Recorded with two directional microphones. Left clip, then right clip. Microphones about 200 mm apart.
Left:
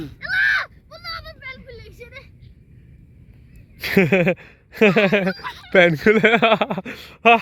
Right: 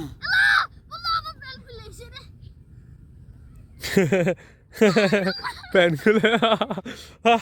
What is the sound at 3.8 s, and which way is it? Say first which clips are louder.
Speech: left 4 dB; centre (ahead or behind).